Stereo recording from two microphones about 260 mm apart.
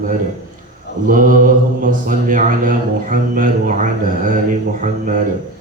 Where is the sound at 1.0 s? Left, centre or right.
Right.